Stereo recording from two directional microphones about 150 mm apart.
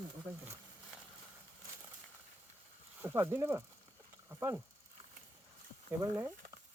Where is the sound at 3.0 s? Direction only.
15° right (ahead or behind).